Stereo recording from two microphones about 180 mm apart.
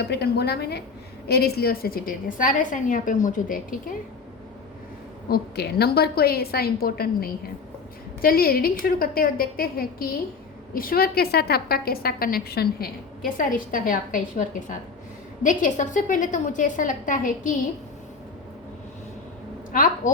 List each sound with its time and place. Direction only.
0.0 s a woman's voice: 65° left (ahead or behind); by 3.8 s 50° left (ahead or behind)
5.3 s a woman's voice: 60° left (ahead or behind)
19.7 s a woman's voice: 50° left (ahead or behind)